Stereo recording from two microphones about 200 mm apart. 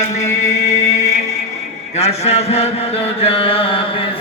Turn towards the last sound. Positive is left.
turn(degrees=30)  # may be behind; listen again after turning